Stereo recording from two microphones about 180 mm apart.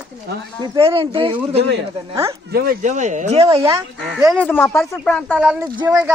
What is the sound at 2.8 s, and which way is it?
Speech, 40° right (ahead or behind).